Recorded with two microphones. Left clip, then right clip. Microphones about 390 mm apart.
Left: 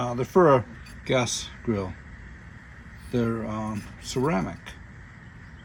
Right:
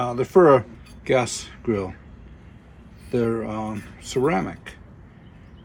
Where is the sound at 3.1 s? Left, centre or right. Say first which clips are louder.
Right 5 dB; centre.